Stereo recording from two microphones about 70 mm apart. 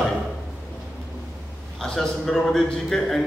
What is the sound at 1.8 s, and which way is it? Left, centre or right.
A man's voice, centre.